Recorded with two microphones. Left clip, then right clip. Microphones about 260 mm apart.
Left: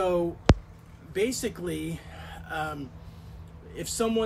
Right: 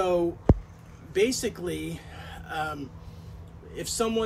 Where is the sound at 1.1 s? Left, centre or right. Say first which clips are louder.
Right 3 dB; centre.